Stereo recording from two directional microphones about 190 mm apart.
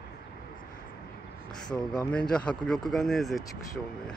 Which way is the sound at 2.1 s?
5° left (ahead or behind).